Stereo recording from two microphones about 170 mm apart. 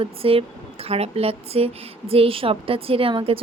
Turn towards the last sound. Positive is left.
turn(degrees=-30)  # may be behind; listen again after turning